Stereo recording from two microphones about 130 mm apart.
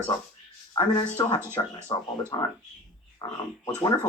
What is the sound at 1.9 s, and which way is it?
Speech, 30° left (ahead or behind).